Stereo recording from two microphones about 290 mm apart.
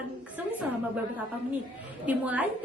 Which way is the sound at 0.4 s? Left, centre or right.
Centre.